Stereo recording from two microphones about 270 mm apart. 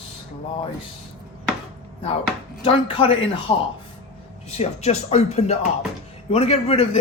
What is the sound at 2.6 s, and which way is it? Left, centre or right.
Speech, centre.